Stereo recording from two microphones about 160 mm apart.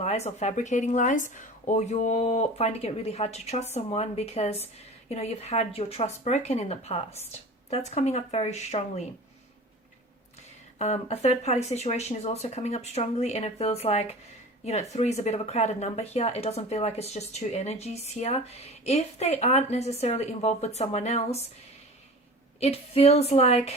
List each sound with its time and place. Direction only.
0.0 s speech: 40° left (ahead or behind)
10.8 s speech: 40° left (ahead or behind)
22.6 s speech: 40° left (ahead or behind)